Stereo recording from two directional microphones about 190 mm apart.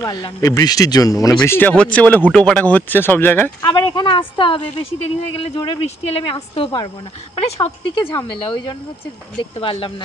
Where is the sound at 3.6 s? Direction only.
20° left (ahead or behind).